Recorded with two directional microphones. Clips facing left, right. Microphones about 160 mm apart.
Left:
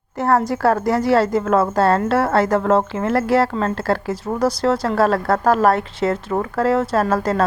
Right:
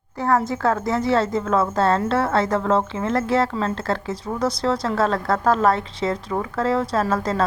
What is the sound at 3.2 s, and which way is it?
A woman's voice, 60° left (ahead or behind).